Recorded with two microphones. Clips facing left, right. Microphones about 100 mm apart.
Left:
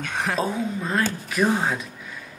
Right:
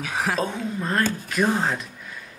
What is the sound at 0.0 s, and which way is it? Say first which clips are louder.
Speech: even; centre (ahead or behind).